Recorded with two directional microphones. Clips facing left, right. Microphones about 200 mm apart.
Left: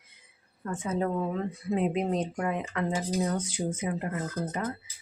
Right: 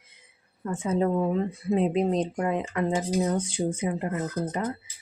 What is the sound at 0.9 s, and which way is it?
Speech, 25° right (ahead or behind).